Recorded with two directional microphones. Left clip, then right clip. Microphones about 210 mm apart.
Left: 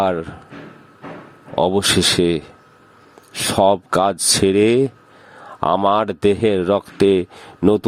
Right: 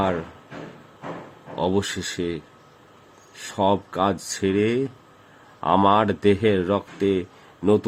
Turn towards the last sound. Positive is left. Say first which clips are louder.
# left 4 dB
turn(degrees=45)  # may be behind; listen again after turning